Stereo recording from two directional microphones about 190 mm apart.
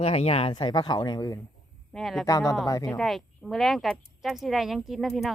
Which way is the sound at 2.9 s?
Centre (ahead or behind).